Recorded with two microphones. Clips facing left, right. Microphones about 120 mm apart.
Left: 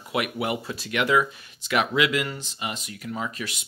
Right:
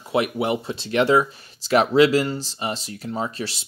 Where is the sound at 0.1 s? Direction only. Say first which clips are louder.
Right 5 dB; 25° right (ahead or behind).